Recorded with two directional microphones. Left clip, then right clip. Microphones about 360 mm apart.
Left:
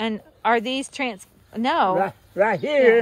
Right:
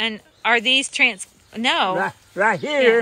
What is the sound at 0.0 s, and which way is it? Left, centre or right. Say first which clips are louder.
Speech: right 1 dB; centre.